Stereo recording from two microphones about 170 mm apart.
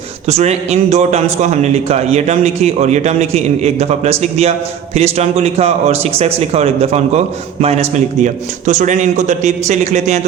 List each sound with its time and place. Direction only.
0.3 s a man's voice: 40° right (ahead or behind)